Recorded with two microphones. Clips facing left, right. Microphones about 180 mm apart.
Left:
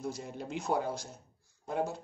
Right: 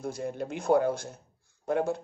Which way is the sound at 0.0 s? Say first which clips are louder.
Right 5 dB; 55° right (ahead or behind).